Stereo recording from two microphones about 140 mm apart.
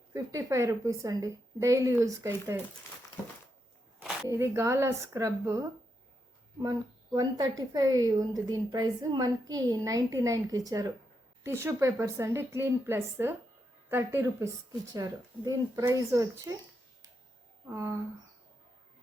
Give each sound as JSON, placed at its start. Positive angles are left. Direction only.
{"t": 0.1, "sound": "a woman's voice", "side_deg": -20}
{"t": 4.3, "sound": "a woman's voice", "side_deg": -20}
{"t": 17.7, "sound": "a woman's voice", "side_deg": -20}